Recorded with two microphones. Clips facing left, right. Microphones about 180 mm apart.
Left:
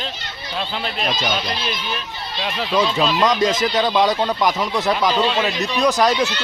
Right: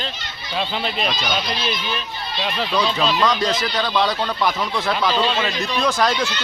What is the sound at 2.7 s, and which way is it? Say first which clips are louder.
Speech: left 3 dB; 25° left (ahead or behind).